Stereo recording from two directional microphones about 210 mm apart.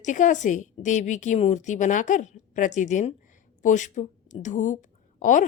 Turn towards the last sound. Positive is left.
turn(degrees=35)  # may be behind; listen again after turning